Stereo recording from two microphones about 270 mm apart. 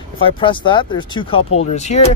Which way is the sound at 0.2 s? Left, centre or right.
Centre.